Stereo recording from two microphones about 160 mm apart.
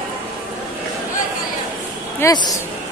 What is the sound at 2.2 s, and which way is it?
Speech, 25° left (ahead or behind).